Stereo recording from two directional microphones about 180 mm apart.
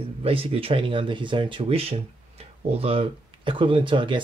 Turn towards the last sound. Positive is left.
turn(degrees=-30)  # may be behind; listen again after turning